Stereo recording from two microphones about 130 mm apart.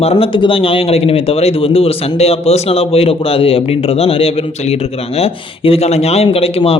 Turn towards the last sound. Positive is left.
turn(degrees=50)  # may be behind; listen again after turning